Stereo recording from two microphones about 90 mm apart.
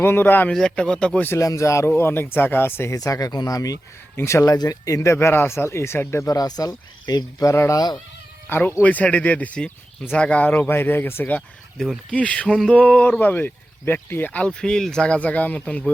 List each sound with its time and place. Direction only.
0.0 s speech: 25° left (ahead or behind)
0.5 s speech: 10° left (ahead or behind)
1.3 s speech: 35° left (ahead or behind)
2.9 s speech: 40° left (ahead or behind)
4.2 s speech: 30° left (ahead or behind)
4.5 s speech: 45° left (ahead or behind)
4.9 s speech: 30° left (ahead or behind); by 7.9 s 45° left (ahead or behind)
8.4 s speech: 25° left (ahead or behind)
11.8 s speech: 5° left (ahead or behind)
12.1 s speech: 15° left (ahead or behind)